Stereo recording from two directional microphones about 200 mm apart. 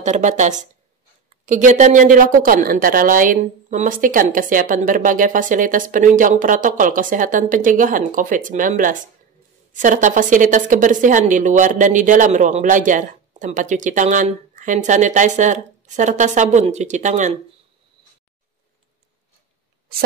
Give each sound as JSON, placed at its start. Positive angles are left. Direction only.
{"t": 0.0, "sound": "speech", "side_deg": -35}